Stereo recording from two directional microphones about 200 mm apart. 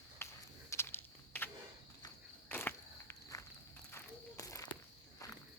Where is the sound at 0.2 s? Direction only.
10° left (ahead or behind).